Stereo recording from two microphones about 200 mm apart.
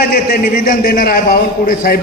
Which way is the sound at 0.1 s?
50° left (ahead or behind).